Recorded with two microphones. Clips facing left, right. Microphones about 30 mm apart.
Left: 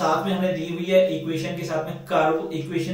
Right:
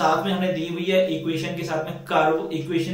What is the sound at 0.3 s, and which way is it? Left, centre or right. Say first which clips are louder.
Speech: even; centre.